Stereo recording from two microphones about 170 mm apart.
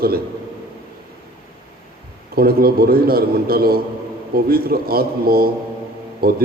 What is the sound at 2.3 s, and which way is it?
A man's voice, 65° right (ahead or behind).